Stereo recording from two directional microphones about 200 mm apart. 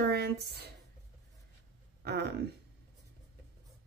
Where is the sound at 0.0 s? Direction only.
55° right (ahead or behind).